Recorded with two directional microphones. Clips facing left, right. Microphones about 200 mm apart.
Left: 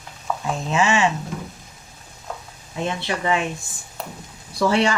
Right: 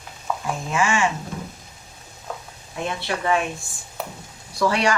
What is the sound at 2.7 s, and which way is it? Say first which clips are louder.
Speech: left 2 dB; 20° left (ahead or behind).